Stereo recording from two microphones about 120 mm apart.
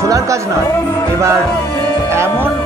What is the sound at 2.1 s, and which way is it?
Music, 20° right (ahead or behind).